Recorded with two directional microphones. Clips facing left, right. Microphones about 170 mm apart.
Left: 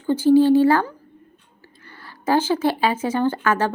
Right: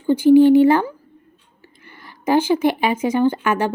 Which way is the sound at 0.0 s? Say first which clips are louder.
Right 4 dB; 15° right (ahead or behind).